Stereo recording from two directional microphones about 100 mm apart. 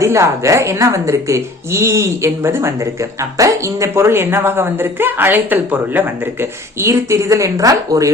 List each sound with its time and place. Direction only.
0.0 s a woman's voice: 30° right (ahead or behind)